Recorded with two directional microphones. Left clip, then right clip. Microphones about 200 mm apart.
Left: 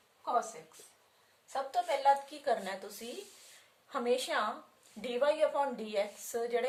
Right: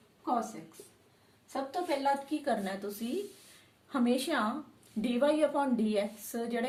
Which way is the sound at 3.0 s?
20° left (ahead or behind).